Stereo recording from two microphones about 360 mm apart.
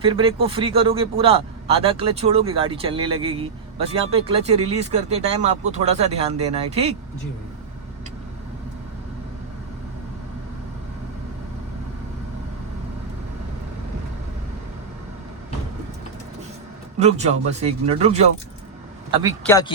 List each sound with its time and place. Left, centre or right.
0.0 s a man's voice: centre
17.0 s a man's voice: centre
19.5 s speech: centre